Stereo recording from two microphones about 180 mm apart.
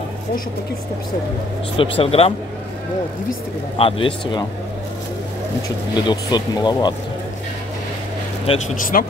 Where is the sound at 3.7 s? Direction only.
30° left (ahead or behind).